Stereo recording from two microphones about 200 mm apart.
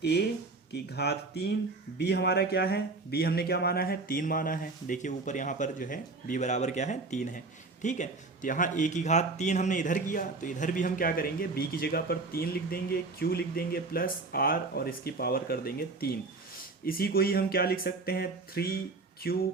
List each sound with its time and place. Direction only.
0.7 s speech: 55° left (ahead or behind)